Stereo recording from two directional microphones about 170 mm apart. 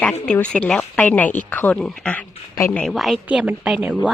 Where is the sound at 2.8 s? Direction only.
Centre (ahead or behind).